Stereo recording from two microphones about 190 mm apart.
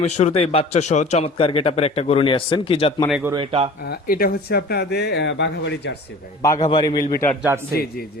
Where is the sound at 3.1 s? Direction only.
5° right (ahead or behind).